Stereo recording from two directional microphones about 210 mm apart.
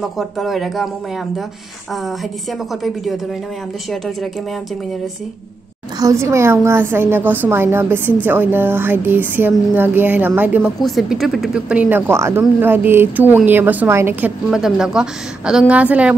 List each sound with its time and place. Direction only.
0.0 s speech: centre (ahead or behind)
5.9 s speech: 15° right (ahead or behind)